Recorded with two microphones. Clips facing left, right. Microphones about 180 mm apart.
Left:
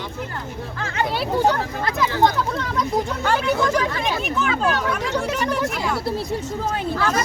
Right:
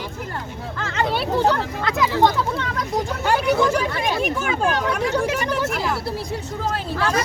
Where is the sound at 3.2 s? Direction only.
10° right (ahead or behind).